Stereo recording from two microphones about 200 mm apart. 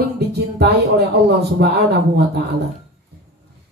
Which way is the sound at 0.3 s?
55° right (ahead or behind).